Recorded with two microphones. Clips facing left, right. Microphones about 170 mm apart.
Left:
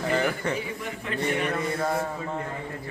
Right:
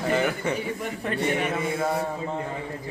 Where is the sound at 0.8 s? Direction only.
45° right (ahead or behind).